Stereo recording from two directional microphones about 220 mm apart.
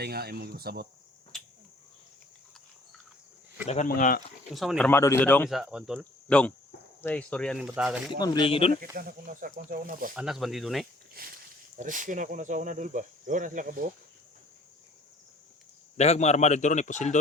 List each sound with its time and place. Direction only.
0.0 s speech: 45° right (ahead or behind)
1.3 s a sound: centre (ahead or behind)
3.7 s a man's voice: 35° left (ahead or behind)
4.5 s speech: centre (ahead or behind)
5.5 s speech: centre (ahead or behind)
8.2 s speech: 20° left (ahead or behind)
8.7 s speech: 40° right (ahead or behind)
10.2 s speech: centre (ahead or behind)
11.2 s speech: 40° right (ahead or behind)
16.0 s a man's voice: 30° left (ahead or behind)